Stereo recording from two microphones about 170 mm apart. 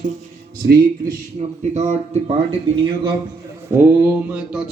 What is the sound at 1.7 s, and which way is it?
Speech, 40° right (ahead or behind).